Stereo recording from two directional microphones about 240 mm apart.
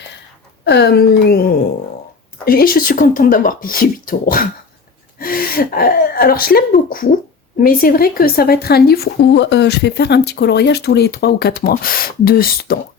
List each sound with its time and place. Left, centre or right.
0.6 s a woman's voice: left